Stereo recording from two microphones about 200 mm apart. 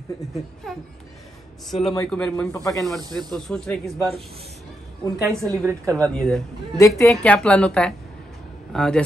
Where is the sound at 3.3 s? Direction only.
Centre (ahead or behind).